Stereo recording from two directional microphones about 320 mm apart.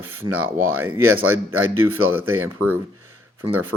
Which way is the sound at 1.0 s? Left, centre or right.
Right.